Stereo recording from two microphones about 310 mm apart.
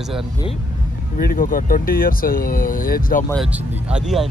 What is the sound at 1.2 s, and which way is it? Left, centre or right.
Speech, left.